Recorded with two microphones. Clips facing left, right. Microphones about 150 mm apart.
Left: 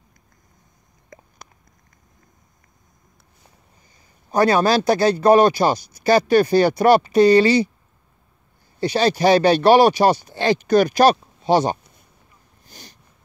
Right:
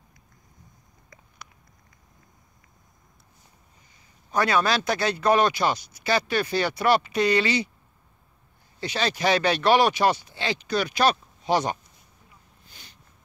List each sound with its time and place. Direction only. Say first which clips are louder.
4.3 s speech: left 7 dB; 35° left (ahead or behind)
8.7 s speech: left 9 dB; 35° left (ahead or behind)
12.6 s a sound: left 9 dB; 40° left (ahead or behind)